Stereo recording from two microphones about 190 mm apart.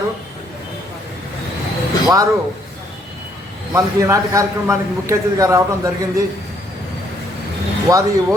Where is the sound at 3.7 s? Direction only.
15° right (ahead or behind).